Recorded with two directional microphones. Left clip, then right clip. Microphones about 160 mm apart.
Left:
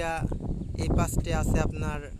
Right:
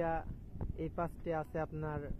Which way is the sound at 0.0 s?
30° left (ahead or behind).